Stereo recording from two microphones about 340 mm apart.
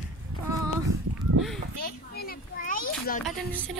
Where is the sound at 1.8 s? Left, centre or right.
Left.